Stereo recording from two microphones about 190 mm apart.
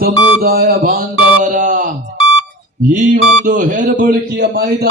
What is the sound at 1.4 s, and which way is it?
A man's voice, 40° right (ahead or behind).